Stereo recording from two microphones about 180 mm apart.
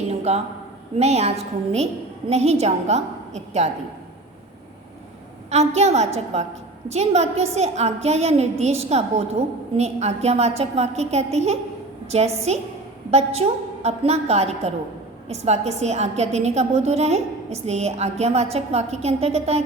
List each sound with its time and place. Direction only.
0.1 s a sound: 35° right (ahead or behind)
0.9 s a woman's voice: 35° right (ahead or behind)
5.5 s a woman's voice: 35° right (ahead or behind)